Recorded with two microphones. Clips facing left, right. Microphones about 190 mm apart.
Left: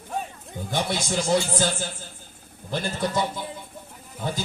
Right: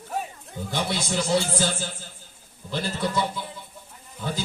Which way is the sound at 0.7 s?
55° left (ahead or behind).